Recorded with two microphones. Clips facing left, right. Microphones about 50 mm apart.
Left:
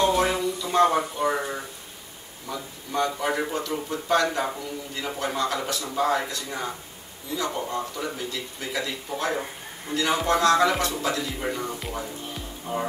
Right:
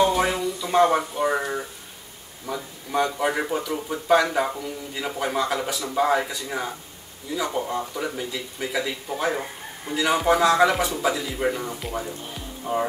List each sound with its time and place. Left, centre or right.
0.0 s speech: centre
12.7 s speech: right